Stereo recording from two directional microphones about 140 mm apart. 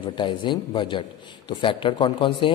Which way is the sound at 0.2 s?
35° left (ahead or behind).